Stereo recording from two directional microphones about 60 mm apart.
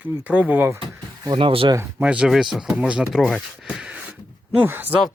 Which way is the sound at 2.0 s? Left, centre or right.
Centre.